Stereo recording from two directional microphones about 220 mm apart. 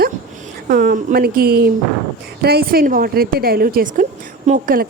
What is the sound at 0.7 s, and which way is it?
A woman's voice, 40° right (ahead or behind).